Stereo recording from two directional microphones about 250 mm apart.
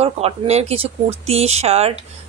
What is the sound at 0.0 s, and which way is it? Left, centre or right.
A woman's voice, right.